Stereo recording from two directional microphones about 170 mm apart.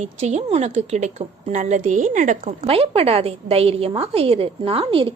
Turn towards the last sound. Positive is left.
turn(degrees=-35)  # may be behind; listen again after turning